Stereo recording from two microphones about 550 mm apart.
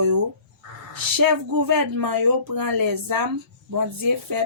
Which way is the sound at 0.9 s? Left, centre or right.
Right.